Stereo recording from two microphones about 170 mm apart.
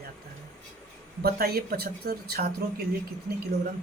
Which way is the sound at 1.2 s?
65° right (ahead or behind).